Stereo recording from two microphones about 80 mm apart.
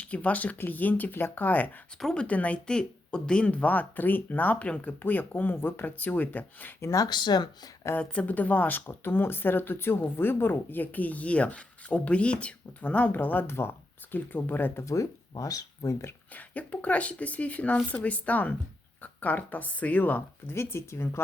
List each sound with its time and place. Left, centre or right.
0.0 s speech: centre
2.0 s speech: centre
2.2 s speech: centre
6.8 s speech: left
7.1 s speech: left
7.9 s speech: centre
14.8 s speech: left
16.3 s speech: centre